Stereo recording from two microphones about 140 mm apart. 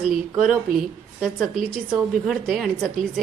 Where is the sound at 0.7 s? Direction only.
90° right.